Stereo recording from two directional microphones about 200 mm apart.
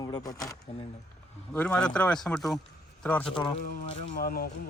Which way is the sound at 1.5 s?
5° left (ahead or behind).